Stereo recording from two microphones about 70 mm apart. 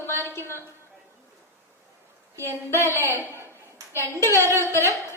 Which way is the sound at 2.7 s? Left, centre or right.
Left.